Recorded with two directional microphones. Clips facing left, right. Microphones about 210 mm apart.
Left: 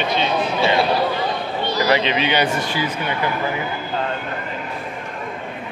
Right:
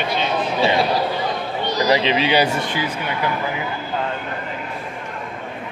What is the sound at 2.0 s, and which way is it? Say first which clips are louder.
Speech: right 2 dB; 30° right (ahead or behind).